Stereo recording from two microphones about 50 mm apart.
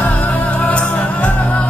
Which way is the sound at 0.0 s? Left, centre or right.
Left.